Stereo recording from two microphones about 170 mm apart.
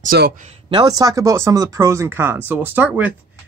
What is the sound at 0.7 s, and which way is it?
Speech, 25° right (ahead or behind).